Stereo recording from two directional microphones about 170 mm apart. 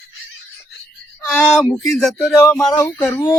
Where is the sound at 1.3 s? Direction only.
Centre (ahead or behind).